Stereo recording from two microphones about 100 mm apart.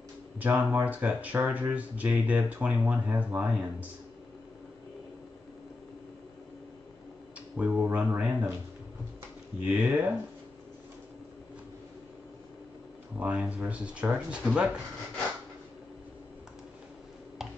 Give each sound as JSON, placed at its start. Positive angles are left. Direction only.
{"t": 0.4, "sound": "speech", "side_deg": -15}
{"t": 7.5, "sound": "speech", "side_deg": -15}
{"t": 9.6, "sound": "speech", "side_deg": -15}
{"t": 13.2, "sound": "speech", "side_deg": -15}